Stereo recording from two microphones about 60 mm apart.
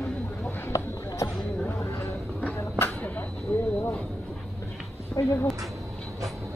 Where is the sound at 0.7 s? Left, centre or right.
Left.